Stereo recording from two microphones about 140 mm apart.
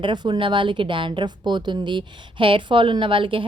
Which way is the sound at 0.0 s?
35° right (ahead or behind).